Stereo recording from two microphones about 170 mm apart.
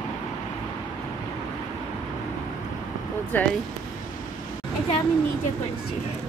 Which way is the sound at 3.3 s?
10° left (ahead or behind).